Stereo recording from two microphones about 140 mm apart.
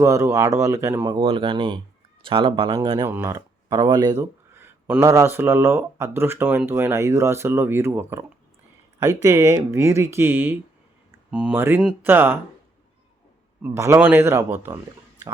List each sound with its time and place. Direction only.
0.0 s speech: 20° right (ahead or behind)
1.2 s speech: 40° right (ahead or behind); by 12.4 s 15° right (ahead or behind)
13.6 s speech: 20° right (ahead or behind)